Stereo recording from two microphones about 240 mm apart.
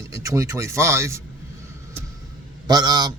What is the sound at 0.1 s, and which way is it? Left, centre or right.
Speech, centre.